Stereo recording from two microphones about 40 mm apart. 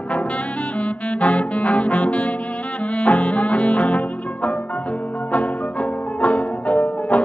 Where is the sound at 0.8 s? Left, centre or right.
Left.